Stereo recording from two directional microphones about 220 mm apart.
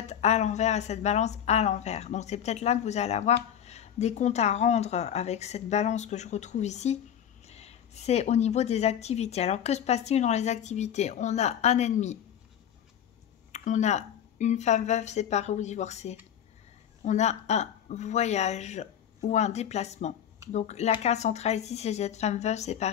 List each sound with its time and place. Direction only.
0.0 s a woman's voice: 30° left (ahead or behind)
13.5 s speech: 30° left (ahead or behind)